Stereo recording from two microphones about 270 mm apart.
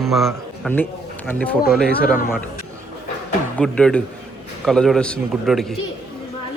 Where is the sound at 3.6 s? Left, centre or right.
Centre.